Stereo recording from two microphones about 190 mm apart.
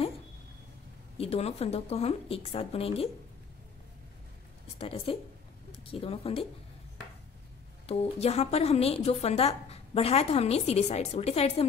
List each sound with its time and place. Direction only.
1.1 s a woman's voice: 30° left (ahead or behind)
4.7 s a woman's voice: 30° left (ahead or behind)
7.8 s a woman's voice: 35° left (ahead or behind)